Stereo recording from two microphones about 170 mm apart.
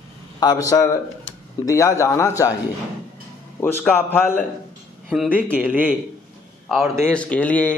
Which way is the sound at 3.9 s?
15° left (ahead or behind).